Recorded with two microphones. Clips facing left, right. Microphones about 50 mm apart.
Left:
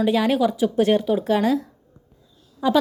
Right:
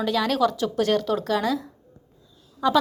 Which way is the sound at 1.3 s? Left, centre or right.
Left.